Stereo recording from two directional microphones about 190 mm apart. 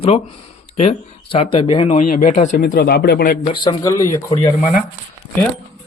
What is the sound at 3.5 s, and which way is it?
Speech, 20° left (ahead or behind).